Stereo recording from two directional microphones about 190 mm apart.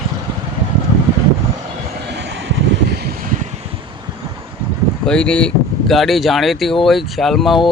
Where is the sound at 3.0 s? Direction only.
45° right (ahead or behind).